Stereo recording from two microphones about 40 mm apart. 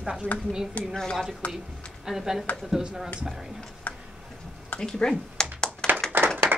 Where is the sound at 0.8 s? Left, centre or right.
Left.